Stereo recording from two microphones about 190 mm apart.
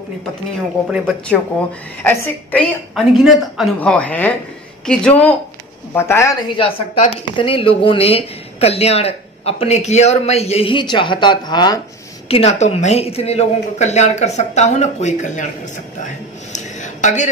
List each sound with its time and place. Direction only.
0.8 s a woman's voice: centre (ahead or behind)
6.6 s a woman's voice: 30° left (ahead or behind)
12.3 s speech: 35° left (ahead or behind)
16.5 s a sound: 40° left (ahead or behind)